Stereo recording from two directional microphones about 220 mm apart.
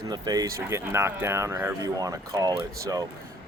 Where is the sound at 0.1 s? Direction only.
15° right (ahead or behind).